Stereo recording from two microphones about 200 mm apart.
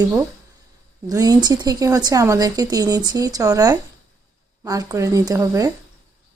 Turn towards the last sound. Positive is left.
turn(degrees=-15)  # may be behind; listen again after turning